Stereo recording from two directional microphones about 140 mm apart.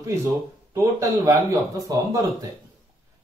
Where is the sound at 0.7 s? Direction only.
20° right (ahead or behind).